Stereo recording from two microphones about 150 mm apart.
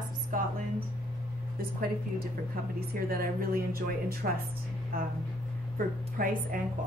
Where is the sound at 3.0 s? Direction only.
80° right.